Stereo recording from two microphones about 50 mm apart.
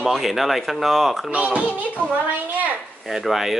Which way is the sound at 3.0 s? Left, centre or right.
Centre.